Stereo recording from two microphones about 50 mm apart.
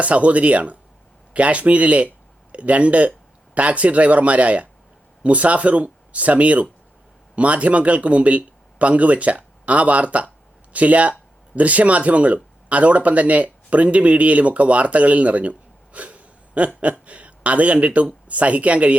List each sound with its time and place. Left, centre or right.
0.0 s speech: right